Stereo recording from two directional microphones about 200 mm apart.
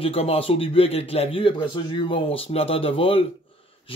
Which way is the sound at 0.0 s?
30° left (ahead or behind).